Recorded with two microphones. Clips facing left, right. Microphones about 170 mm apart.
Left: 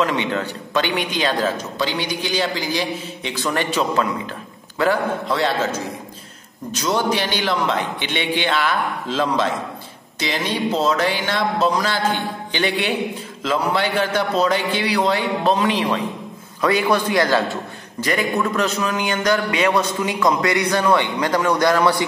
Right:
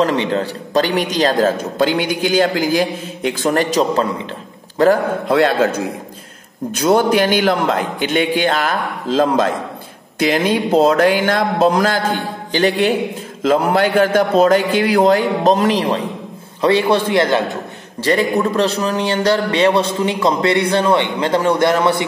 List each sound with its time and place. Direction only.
0.0 s a man's voice: 35° right (ahead or behind)
18.4 s a man's voice: 35° right (ahead or behind)